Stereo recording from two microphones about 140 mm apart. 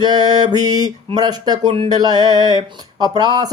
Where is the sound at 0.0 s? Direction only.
30° right (ahead or behind).